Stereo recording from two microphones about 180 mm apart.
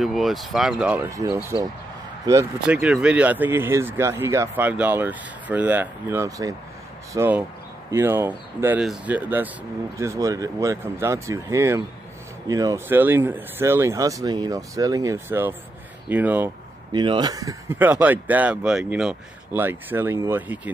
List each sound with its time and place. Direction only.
0.0 s speech: centre (ahead or behind)
1.1 s speech: 15° right (ahead or behind)
2.6 s speech: 5° right (ahead or behind)
16.9 s speech: 25° right (ahead or behind); by 20.7 s 10° right (ahead or behind)